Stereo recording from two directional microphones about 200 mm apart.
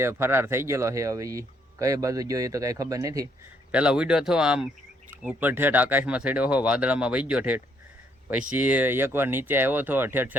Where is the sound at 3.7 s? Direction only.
5° right (ahead or behind).